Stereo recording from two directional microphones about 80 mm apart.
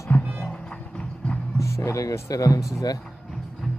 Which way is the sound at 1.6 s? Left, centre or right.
Left.